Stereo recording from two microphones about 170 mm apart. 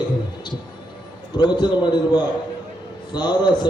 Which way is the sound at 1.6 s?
25° left (ahead or behind).